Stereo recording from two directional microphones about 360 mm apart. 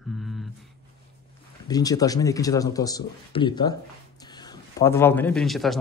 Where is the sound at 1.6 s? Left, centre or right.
Centre.